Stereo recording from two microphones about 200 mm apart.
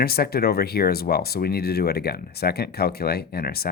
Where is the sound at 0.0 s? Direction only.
50° left (ahead or behind).